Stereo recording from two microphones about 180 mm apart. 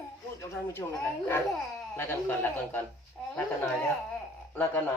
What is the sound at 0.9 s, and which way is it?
A man's voice, 10° left (ahead or behind).